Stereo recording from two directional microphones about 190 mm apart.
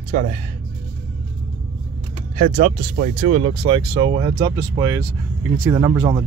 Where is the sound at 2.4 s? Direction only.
45° right (ahead or behind).